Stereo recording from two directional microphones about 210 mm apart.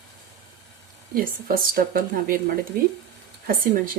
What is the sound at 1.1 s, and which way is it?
Speech, 45° right (ahead or behind).